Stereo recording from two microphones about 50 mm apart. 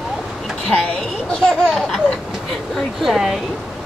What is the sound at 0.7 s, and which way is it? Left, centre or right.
Speech, centre.